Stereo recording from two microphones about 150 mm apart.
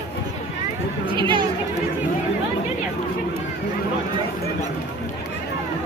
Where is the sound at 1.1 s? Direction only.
35° right (ahead or behind).